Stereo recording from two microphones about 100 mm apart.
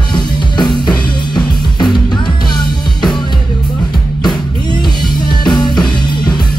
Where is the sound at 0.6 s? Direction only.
45° left (ahead or behind).